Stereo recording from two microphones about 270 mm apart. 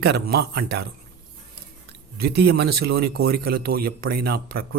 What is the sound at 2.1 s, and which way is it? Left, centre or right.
A man's voice, right.